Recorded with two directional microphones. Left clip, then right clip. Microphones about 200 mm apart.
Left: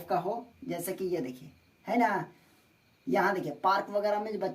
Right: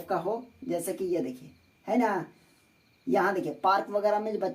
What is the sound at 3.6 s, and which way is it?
Speech, 15° right (ahead or behind).